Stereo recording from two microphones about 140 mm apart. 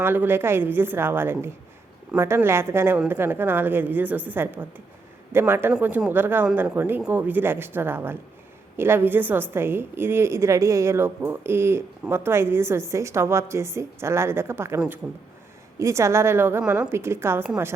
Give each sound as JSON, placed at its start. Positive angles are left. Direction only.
{"t": 0.0, "sound": "a woman's voice", "side_deg": -15}
{"t": 15.8, "sound": "a woman's voice", "side_deg": -20}